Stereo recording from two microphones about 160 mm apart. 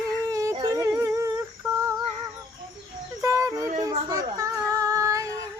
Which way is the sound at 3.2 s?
20° right (ahead or behind).